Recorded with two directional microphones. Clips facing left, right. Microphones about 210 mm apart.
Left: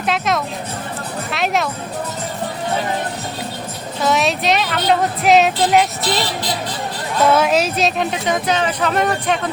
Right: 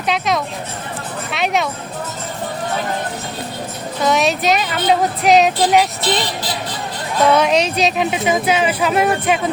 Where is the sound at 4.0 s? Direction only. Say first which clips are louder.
Right 1 dB; centre (ahead or behind).